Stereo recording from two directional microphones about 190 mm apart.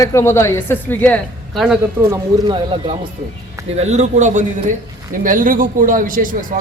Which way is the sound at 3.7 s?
35° right (ahead or behind).